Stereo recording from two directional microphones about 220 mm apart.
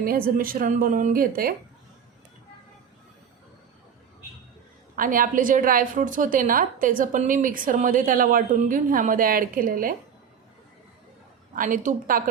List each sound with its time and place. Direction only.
0.0 s a woman's voice: 40° right (ahead or behind)
4.9 s a woman's voice: 40° right (ahead or behind)
11.5 s a woman's voice: 40° right (ahead or behind)